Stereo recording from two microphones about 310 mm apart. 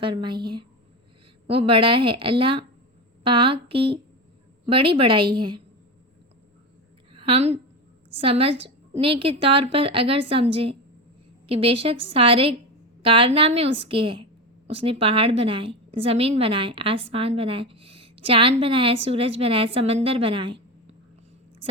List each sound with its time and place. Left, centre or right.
0.0 s a woman's voice: centre
1.5 s a woman's voice: centre
7.1 s a sound: centre
8.1 s a woman's voice: centre